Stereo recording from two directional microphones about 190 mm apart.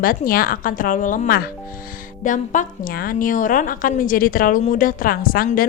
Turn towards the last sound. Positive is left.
turn(degrees=50)  # may be behind; listen again after turning